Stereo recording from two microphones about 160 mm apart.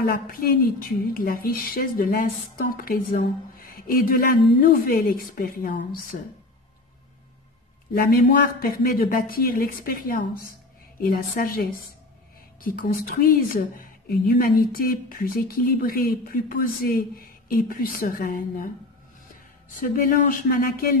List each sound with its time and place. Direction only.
0.0 s a woman's voice: 70° left (ahead or behind)
7.9 s a man's voice: 65° left (ahead or behind)
19.8 s a woman's voice: 60° left (ahead or behind)